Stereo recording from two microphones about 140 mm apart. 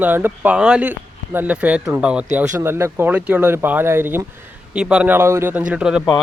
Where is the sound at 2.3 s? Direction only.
20° right (ahead or behind).